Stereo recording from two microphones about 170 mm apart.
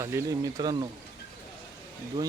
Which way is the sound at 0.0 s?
15° right (ahead or behind).